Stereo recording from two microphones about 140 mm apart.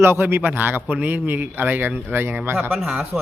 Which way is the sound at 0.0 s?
15° right (ahead or behind).